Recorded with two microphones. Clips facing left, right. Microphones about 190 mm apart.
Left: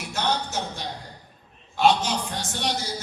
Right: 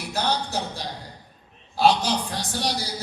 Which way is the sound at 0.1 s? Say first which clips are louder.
Right 1 dB; 35° right (ahead or behind).